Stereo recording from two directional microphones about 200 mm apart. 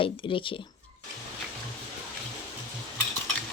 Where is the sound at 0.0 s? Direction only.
25° left (ahead or behind).